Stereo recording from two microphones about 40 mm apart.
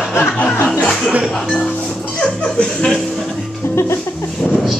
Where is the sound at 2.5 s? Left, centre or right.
Left.